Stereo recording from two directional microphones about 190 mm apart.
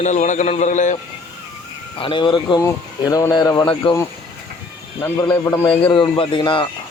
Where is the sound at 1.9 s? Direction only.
25° left (ahead or behind).